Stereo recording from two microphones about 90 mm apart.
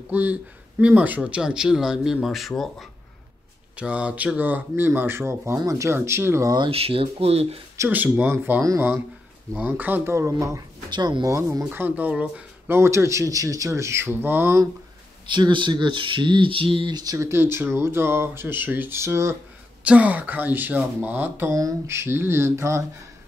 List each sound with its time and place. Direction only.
0.1 s speech: 15° right (ahead or behind); by 2.9 s centre (ahead or behind)
3.7 s speech: 10° right (ahead or behind); by 6.5 s 30° right (ahead or behind)
6.7 s speech: 90° right
7.9 s speech: 20° right (ahead or behind); by 10.6 s 35° right (ahead or behind)
10.9 s speech: 55° right (ahead or behind)
11.2 s speech: 35° right (ahead or behind); by 12.7 s 15° right (ahead or behind)
12.7 s speech: 30° right (ahead or behind)
15.2 s speech: 60° right (ahead or behind); by 16.9 s 75° right (ahead or behind)
16.9 s speech: 45° right (ahead or behind)
17.3 s speech: 25° right (ahead or behind)
19.8 s speech: 15° right (ahead or behind)
21.5 s speech: 35° right (ahead or behind)